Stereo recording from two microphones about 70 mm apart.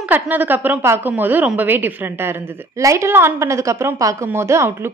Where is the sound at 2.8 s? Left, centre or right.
Right.